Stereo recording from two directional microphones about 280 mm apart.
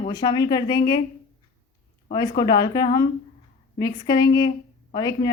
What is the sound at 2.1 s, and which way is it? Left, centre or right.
Speech, centre.